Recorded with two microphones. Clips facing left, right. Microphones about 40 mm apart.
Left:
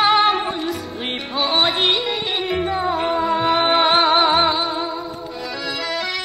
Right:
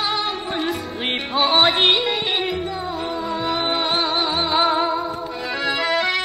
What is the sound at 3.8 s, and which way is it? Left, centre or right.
Music, left.